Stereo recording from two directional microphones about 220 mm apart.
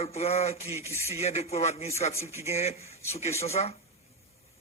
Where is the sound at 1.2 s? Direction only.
30° left (ahead or behind).